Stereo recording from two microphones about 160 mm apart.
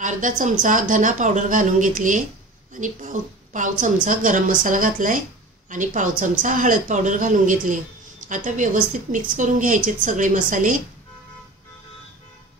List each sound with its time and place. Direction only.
0.0 s a woman's voice: 55° right (ahead or behind)